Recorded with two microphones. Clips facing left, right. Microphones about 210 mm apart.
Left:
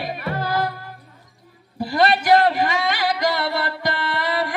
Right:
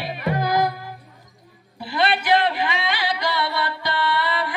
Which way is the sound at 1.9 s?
45° left (ahead or behind).